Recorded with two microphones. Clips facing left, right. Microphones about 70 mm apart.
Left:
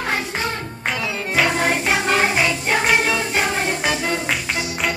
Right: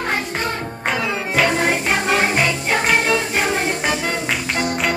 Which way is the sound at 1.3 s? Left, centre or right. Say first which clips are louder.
Right 1 dB; centre.